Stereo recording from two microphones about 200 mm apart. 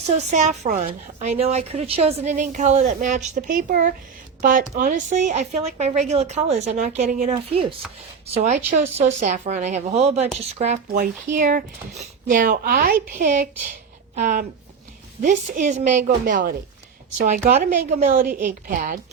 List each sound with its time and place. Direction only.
0.3 s a woman's voice: 35° right (ahead or behind)